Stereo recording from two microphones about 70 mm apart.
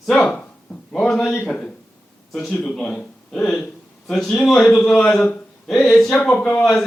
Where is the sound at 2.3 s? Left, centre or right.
Centre.